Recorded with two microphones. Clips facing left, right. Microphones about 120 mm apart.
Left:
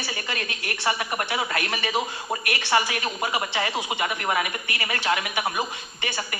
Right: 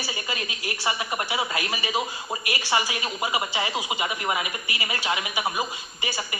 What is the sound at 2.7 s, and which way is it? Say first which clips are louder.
Speech: left 3 dB; 10° right (ahead or behind).